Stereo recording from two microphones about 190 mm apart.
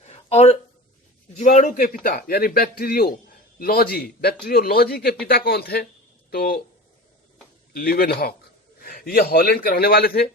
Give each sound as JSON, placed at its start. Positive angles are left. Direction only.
{"t": 0.1, "sound": "a sound", "side_deg": 35}
{"t": 1.4, "sound": "a man's voice", "side_deg": 40}
{"t": 7.7, "sound": "a man's voice", "side_deg": 50}